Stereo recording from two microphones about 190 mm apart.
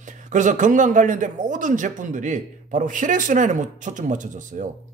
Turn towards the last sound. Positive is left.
turn(degrees=-40)  # may be behind; listen again after turning